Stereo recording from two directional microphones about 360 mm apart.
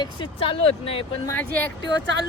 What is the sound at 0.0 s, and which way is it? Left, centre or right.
Speech, centre.